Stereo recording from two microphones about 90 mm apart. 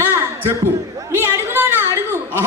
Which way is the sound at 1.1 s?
25° right (ahead or behind).